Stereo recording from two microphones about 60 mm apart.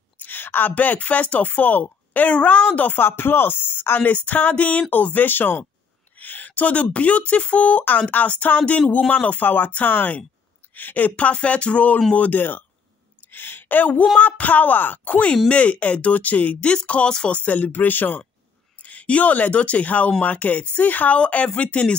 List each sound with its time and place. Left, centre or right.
0.2 s speech: left
4.1 s speech: left
17.4 s speech: left